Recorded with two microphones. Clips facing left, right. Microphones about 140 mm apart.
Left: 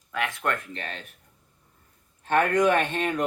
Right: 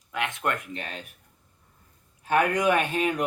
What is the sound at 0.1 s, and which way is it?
Speech, 20° right (ahead or behind).